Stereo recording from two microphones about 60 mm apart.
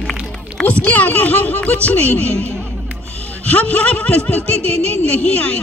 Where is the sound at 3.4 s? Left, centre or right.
Left.